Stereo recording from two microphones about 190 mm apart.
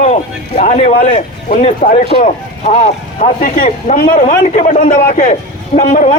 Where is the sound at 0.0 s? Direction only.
35° left (ahead or behind).